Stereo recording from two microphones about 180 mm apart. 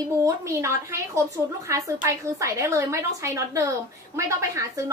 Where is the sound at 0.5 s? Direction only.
15° right (ahead or behind).